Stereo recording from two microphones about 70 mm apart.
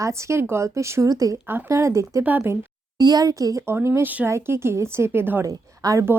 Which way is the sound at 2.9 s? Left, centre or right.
Right.